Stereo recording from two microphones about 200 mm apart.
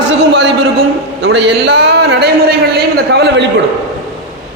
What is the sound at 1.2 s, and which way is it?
A man's voice, 60° right (ahead or behind).